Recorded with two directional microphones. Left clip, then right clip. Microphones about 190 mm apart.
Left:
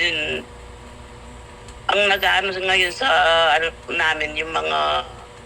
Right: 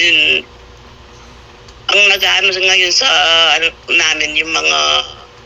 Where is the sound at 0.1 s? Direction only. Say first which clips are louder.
Right 13 dB; 25° right (ahead or behind).